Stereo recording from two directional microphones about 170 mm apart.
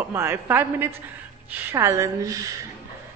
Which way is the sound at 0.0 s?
15° right (ahead or behind).